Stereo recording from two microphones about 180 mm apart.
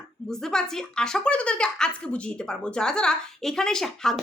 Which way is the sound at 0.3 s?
5° left (ahead or behind).